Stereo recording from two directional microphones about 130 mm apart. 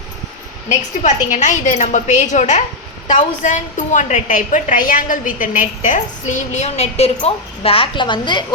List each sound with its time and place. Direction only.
0.7 s a woman's voice: 70° left (ahead or behind); by 8.4 s 35° left (ahead or behind)